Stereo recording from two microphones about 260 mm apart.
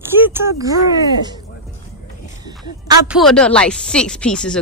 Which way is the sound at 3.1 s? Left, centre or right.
Centre.